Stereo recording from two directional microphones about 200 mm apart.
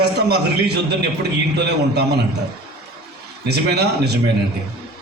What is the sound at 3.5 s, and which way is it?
Speech, 55° right (ahead or behind).